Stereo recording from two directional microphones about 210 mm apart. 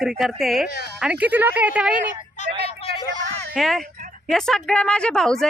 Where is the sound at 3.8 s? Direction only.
40° right (ahead or behind).